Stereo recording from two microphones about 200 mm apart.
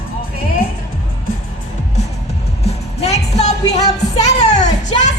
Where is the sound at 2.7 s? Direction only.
30° left (ahead or behind).